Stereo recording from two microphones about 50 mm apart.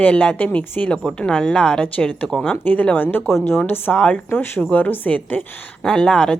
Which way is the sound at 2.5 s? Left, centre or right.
Left.